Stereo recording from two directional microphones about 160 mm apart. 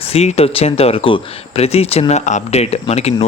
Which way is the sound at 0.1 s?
40° left (ahead or behind).